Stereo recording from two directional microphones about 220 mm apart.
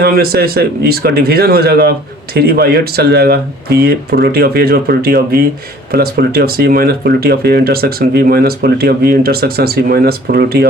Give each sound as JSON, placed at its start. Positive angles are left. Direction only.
{"t": 0.0, "sound": "speech", "side_deg": -45}